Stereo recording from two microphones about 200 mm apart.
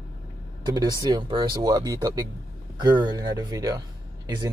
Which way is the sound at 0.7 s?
20° right (ahead or behind).